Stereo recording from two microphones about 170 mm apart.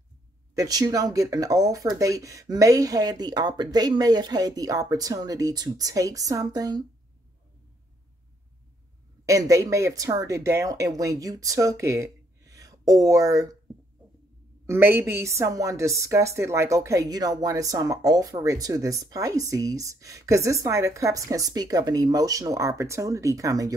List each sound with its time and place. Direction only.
0.6 s a woman's voice: 20° right (ahead or behind)
9.2 s a woman's voice: 20° right (ahead or behind)
14.7 s a woman's voice: 15° right (ahead or behind)